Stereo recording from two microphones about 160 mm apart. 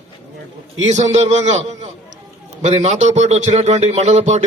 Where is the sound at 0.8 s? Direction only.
45° right (ahead or behind).